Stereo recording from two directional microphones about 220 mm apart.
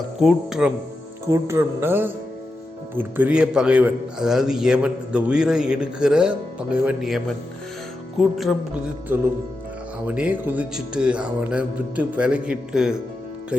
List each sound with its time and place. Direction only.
0.2 s speech: centre (ahead or behind)
1.3 s a sound: 10° right (ahead or behind)
2.9 s a man's voice: 10° right (ahead or behind)
8.2 s a man's voice: centre (ahead or behind)
9.1 s a sound: 10° right (ahead or behind)
10.1 s a man's voice: 5° right (ahead or behind)